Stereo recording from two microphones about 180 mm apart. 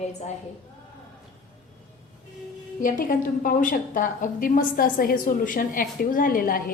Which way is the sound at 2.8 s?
50° left (ahead or behind).